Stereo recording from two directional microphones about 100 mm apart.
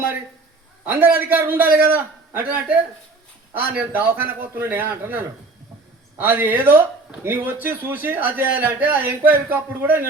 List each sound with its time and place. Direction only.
0.9 s a man's voice: 15° right (ahead or behind)